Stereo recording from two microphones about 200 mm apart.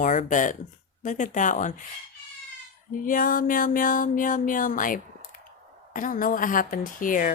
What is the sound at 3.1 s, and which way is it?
Speech, 45° left (ahead or behind).